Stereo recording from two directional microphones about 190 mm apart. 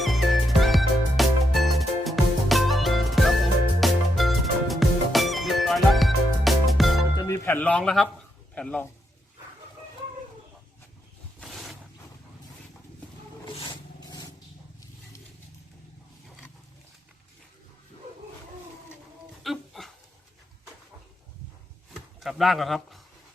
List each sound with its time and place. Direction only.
0.0 s music: centre (ahead or behind)
7.2 s speech: 15° left (ahead or behind)
11.3 s vehicle: centre (ahead or behind)
13.5 s roar: 25° left (ahead or behind)
19.4 s a sound: centre (ahead or behind)
22.2 s speech: centre (ahead or behind)